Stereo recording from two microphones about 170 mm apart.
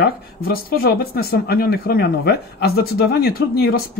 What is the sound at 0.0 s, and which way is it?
Speech, 60° left (ahead or behind).